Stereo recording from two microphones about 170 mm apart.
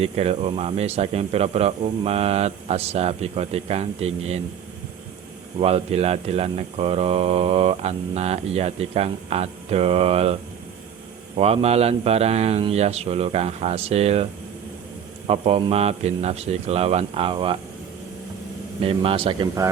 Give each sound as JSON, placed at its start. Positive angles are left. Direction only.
{"t": 0.0, "sound": "speech", "side_deg": -35}
{"t": 5.5, "sound": "speech", "side_deg": -35}
{"t": 11.3, "sound": "speech", "side_deg": -35}
{"t": 15.3, "sound": "speech", "side_deg": -35}
{"t": 18.8, "sound": "speech", "side_deg": -35}